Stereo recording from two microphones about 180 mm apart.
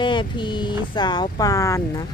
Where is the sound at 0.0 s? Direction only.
25° left (ahead or behind).